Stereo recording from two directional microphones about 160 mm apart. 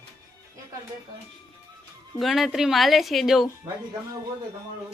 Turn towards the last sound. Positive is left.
turn(degrees=0)  # may be behind; listen again after turning